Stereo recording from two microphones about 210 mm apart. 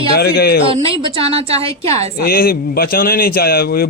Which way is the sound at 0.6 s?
25° right (ahead or behind).